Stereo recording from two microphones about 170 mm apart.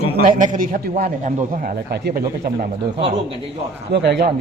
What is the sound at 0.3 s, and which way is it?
A man's voice, 50° right (ahead or behind).